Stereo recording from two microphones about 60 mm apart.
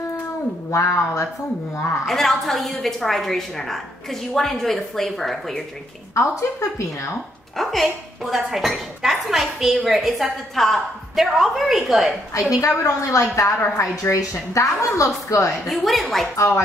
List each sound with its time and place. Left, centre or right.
0.7 s a woman's voice: left
2.0 s speech: centre
6.6 s a woman's voice: left
7.5 s speech: centre
12.4 s a woman's voice: left
15.7 s speech: centre